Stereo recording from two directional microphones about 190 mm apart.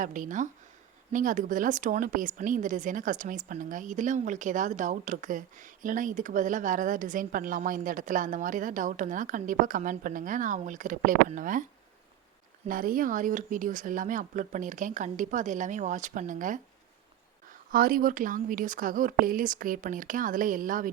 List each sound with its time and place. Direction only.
0.0 s a woman's voice: 45° right (ahead or behind)
12.6 s a woman's voice: 45° right (ahead or behind)
17.7 s a woman's voice: 50° right (ahead or behind)